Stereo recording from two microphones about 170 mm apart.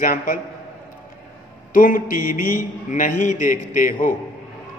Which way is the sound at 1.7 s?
55° left (ahead or behind).